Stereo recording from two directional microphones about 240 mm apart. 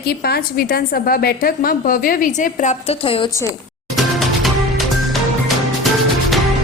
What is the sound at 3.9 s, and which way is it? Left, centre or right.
Music, centre.